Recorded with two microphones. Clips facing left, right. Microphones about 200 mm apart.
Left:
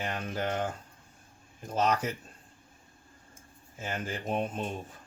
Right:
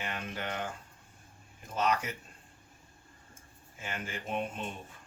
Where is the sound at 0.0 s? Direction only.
40° left (ahead or behind).